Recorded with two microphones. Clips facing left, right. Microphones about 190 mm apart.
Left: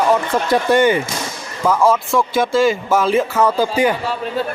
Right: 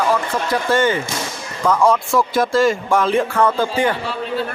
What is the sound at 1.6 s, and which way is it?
A man's voice, 5° left (ahead or behind).